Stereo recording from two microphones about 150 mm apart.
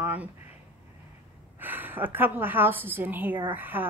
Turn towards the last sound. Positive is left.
turn(degrees=-15)  # may be behind; listen again after turning